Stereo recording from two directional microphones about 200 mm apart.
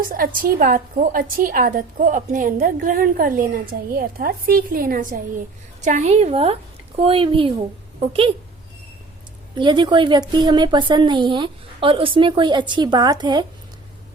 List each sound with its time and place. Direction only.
0.0 s a woman's voice: 45° right (ahead or behind); by 7.5 s 25° right (ahead or behind)
9.6 s a woman's voice: 25° right (ahead or behind)